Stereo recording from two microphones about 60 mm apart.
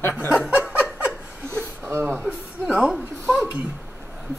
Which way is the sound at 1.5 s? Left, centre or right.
Right.